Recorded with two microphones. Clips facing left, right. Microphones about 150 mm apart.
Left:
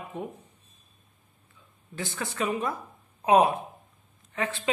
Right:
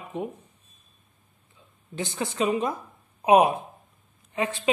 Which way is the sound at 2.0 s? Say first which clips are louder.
Right 4 dB; 20° right (ahead or behind).